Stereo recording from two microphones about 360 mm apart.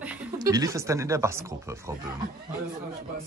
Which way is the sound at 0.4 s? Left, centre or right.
Centre.